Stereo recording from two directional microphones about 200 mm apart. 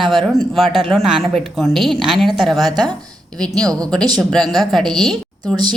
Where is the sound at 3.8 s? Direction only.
5° left (ahead or behind).